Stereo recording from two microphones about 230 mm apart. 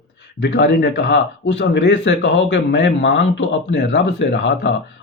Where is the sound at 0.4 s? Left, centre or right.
Left.